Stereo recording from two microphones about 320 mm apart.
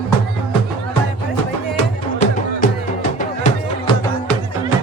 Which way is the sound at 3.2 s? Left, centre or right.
Left.